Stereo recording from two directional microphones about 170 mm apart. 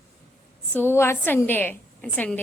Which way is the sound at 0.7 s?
15° left (ahead or behind).